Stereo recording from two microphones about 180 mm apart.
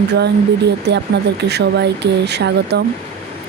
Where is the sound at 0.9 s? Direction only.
70° right (ahead or behind).